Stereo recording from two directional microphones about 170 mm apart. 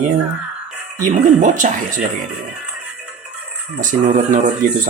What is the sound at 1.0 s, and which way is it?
Speech, 45° right (ahead or behind).